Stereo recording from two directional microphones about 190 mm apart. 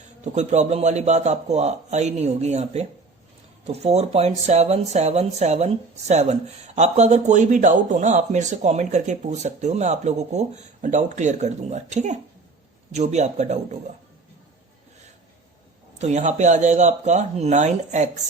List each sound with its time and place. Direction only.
0.3 s speech: 35° right (ahead or behind)
16.0 s speech: 35° right (ahead or behind)